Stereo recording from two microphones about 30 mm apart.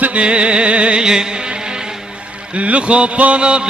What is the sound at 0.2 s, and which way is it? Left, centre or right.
Music, right.